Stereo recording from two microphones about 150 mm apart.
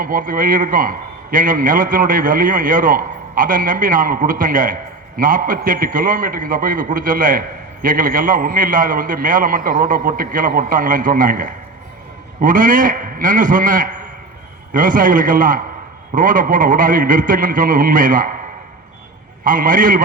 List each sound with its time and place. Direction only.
0.0 s a man's voice: 65° right (ahead or behind)
19.5 s a man's voice: 65° right (ahead or behind)